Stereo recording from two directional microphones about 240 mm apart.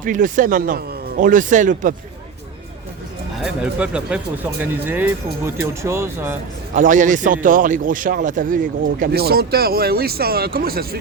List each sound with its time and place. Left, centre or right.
0.0 s a man's voice: right
3.4 s speech: centre
6.7 s a man's voice: right